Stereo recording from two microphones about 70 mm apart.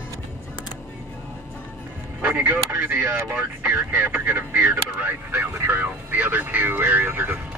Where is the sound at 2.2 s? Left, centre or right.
Right.